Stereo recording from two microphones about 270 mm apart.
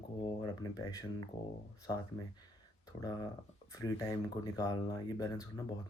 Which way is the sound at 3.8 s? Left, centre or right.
Centre.